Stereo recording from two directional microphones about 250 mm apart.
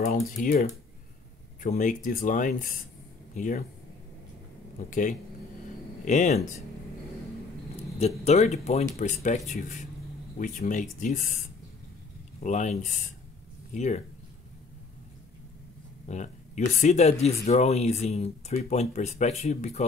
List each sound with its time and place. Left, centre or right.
0.0 s speech: left
4.7 s speech: left
8.2 s speech: left
12.4 s speech: left
13.7 s speech: left
16.1 s speech: left